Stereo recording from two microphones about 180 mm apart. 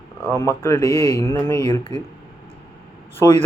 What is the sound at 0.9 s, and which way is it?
Speech, 20° right (ahead or behind).